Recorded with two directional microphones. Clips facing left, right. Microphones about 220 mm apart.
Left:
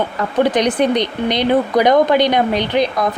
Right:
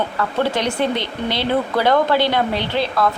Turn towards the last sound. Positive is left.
turn(degrees=15)  # may be behind; listen again after turning